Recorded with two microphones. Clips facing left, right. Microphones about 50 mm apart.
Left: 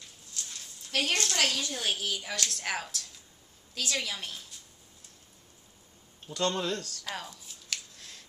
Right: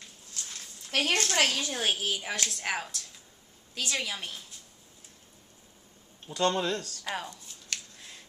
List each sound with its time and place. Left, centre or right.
0.8 s a woman's voice: right
2.1 s speech: right
6.2 s speech: centre
7.2 s scissors: centre
8.0 s scissors: centre